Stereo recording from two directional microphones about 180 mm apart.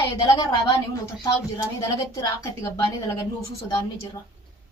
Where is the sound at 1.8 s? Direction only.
20° left (ahead or behind).